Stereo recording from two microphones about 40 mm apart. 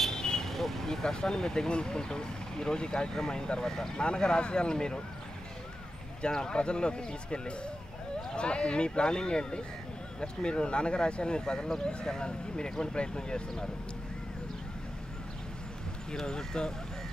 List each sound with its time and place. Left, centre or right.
0.0 s speech: centre
6.2 s speech: left
16.3 s speech: centre